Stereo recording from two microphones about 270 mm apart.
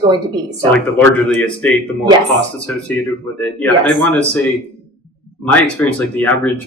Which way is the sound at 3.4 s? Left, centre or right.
Centre.